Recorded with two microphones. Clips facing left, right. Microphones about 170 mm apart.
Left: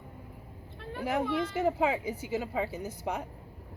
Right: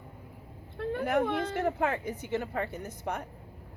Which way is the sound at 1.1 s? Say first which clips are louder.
Even; 55° right (ahead or behind).